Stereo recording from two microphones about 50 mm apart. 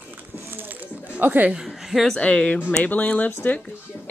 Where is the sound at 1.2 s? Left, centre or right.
Right.